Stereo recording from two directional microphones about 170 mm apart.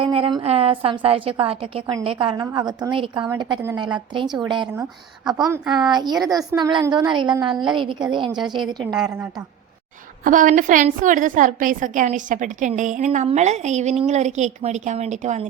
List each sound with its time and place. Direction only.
0.0 s a woman's voice: 30° right (ahead or behind)
10.2 s a woman's voice: 50° right (ahead or behind)